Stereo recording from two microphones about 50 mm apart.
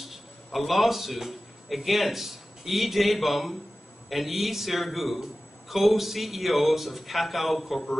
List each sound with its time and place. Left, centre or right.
0.0 s a man's voice: centre